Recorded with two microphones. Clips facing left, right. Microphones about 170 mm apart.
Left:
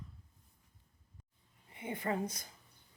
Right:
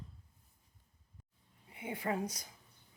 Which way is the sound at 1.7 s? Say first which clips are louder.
Even; 10° right (ahead or behind).